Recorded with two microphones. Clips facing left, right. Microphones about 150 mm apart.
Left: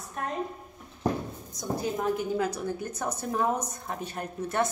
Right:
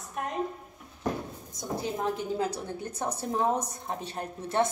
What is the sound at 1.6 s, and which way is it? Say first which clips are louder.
A woman's voice: left 2 dB; 25° right (ahead or behind).